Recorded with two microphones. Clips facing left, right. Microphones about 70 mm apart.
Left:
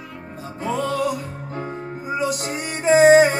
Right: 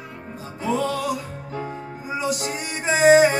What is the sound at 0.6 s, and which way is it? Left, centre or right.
Music, left.